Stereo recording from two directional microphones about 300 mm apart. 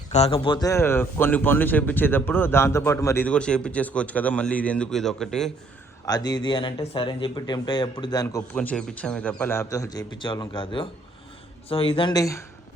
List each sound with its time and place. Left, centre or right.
0.1 s a man's voice: centre
6.1 s a man's voice: centre